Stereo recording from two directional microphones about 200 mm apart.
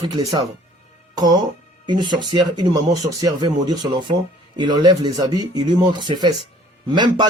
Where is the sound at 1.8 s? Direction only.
25° right (ahead or behind).